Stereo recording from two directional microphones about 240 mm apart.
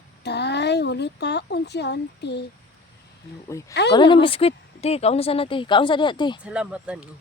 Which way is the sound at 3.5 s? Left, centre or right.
Centre.